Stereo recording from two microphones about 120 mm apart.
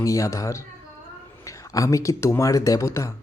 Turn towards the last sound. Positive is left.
turn(degrees=25)  # may be behind; listen again after turning